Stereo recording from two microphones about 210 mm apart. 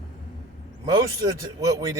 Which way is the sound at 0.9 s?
15° right (ahead or behind).